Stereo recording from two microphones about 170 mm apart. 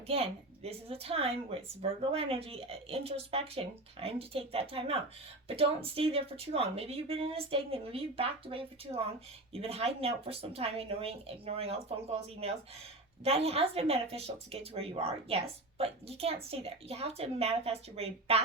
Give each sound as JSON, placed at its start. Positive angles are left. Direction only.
{"t": 0.1, "sound": "a woman's voice", "side_deg": -35}